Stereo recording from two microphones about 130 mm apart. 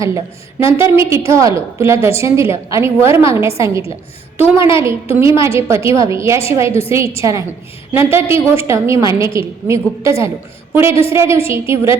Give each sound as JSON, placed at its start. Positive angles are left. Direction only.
{"t": 0.6, "sound": "a woman's voice", "side_deg": -20}